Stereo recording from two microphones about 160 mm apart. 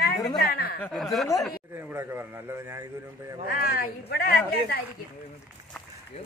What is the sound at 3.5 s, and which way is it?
Speech, 70° left (ahead or behind).